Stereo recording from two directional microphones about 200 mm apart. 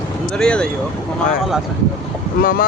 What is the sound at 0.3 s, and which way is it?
Speech, 5° left (ahead or behind).